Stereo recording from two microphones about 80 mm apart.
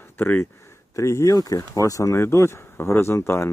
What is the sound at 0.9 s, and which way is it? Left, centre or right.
Speech, left.